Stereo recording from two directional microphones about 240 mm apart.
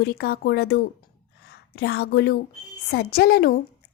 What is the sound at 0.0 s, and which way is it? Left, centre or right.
A woman's voice, left.